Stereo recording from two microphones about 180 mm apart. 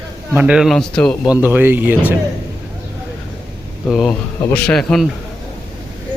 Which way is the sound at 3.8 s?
Centre (ahead or behind).